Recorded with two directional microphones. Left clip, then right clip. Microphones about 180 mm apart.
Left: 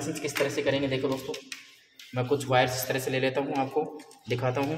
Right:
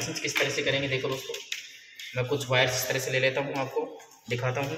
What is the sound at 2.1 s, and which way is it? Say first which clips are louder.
A man's voice: left 2 dB; 50° left (ahead or behind).